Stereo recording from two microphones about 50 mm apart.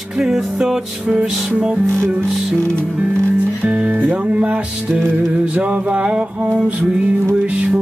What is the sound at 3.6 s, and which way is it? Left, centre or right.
Music, right.